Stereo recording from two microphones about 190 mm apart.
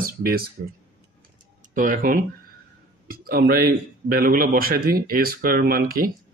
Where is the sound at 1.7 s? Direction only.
45° right (ahead or behind).